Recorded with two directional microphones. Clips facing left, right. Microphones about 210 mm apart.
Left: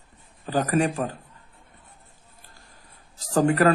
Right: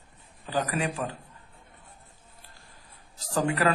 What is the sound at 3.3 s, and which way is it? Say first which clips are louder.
Speech: left 6 dB; 45° left (ahead or behind).